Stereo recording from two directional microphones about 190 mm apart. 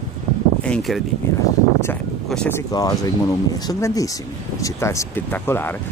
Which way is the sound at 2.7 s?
20° left (ahead or behind).